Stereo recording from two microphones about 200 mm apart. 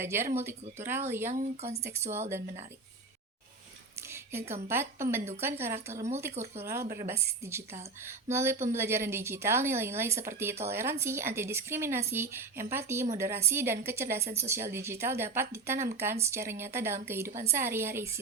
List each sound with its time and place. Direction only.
0.0 s speech: 10° right (ahead or behind)
1.3 s speech: 35° right (ahead or behind)
1.8 s speech: 15° right (ahead or behind)
4.1 s a sound: 10° right (ahead or behind)
4.7 s speech: 10° right (ahead or behind)